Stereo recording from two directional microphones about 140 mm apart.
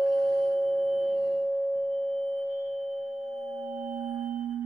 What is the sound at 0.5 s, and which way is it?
Singing bowl, 15° right (ahead or behind).